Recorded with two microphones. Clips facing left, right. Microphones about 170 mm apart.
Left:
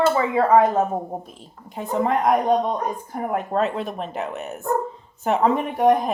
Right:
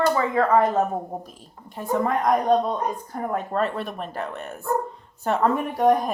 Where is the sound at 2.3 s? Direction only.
10° left (ahead or behind).